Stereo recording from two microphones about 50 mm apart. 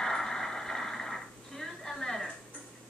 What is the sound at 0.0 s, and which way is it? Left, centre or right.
Television, centre.